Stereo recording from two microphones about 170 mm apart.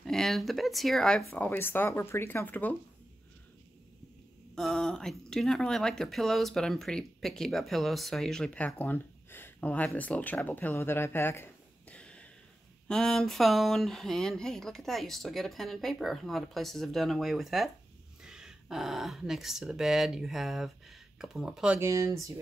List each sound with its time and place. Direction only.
0.0 s speech: centre (ahead or behind)
4.6 s speech: centre (ahead or behind)
21.7 s speech: 15° right (ahead or behind)